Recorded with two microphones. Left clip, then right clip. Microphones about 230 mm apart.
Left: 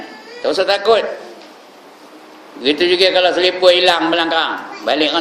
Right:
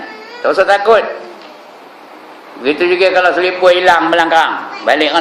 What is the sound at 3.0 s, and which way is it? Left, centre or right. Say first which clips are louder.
A man's voice: right 3 dB; left.